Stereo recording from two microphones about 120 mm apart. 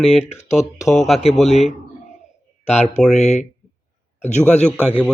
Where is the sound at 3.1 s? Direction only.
75° left (ahead or behind).